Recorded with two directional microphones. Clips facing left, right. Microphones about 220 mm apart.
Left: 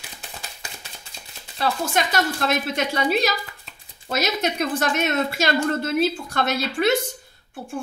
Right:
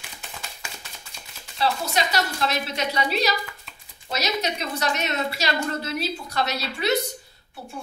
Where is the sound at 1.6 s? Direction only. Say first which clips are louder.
Left 1 dB; 50° left (ahead or behind).